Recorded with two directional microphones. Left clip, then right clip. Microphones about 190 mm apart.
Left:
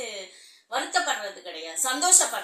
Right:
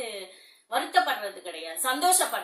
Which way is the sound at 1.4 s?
5° right (ahead or behind).